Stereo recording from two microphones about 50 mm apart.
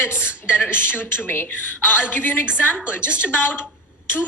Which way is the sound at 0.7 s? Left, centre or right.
Left.